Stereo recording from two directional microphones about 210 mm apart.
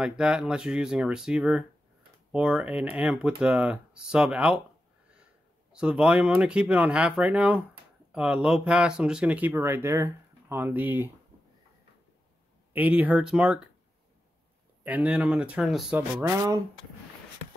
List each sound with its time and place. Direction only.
0.2 s speech: 5° right (ahead or behind)
5.7 s speech: 5° right (ahead or behind)
12.7 s speech: 10° right (ahead or behind)
14.8 s speech: 10° right (ahead or behind)
16.2 s speech: 20° right (ahead or behind)